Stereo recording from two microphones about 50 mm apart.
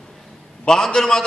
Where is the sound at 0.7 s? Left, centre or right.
Centre.